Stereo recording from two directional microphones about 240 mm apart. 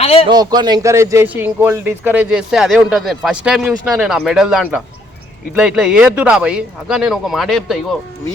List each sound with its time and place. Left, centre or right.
0.0 s a man's voice: left
0.3 s a man's voice: centre